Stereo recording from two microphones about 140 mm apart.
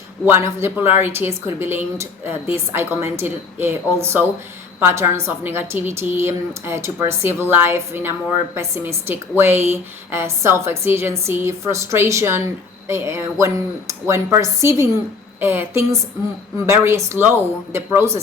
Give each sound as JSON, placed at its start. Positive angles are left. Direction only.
{"t": 0.3, "sound": "a woman's voice", "side_deg": -20}